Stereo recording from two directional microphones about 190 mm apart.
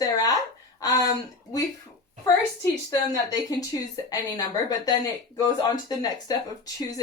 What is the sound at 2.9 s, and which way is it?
Speech, 20° left (ahead or behind).